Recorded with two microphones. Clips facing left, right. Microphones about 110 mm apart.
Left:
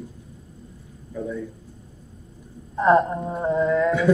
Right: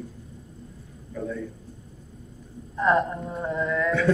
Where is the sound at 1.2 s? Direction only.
15° left (ahead or behind).